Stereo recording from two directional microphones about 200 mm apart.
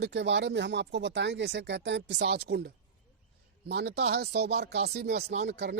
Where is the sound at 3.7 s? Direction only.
55° right (ahead or behind).